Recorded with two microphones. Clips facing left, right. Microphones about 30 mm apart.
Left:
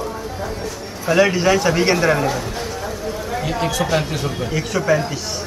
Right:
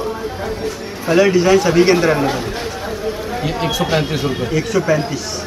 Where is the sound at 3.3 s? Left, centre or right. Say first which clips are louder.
Even; centre.